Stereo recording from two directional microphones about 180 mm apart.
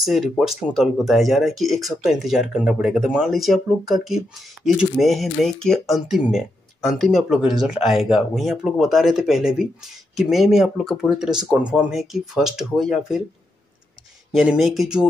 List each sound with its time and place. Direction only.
0.0 s speech: centre (ahead or behind)
14.3 s speech: centre (ahead or behind)